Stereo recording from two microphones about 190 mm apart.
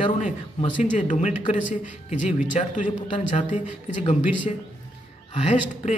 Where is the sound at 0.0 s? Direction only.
30° left (ahead or behind).